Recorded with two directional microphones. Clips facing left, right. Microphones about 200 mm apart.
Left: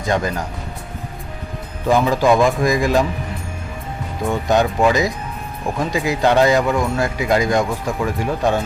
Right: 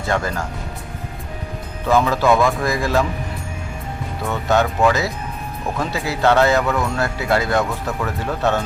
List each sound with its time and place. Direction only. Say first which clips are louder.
0.0 s speech: left 2 dB; 15° left (ahead or behind)
1.9 s speech: left 1 dB; 15° left (ahead or behind)
4.3 s speech: left 1 dB; 15° left (ahead or behind)